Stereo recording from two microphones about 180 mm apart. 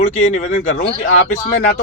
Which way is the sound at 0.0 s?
40° left (ahead or behind).